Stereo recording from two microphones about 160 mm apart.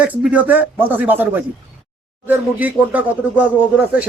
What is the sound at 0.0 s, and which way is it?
Speech, 10° right (ahead or behind).